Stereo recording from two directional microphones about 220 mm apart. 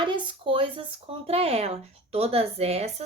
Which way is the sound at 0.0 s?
20° right (ahead or behind).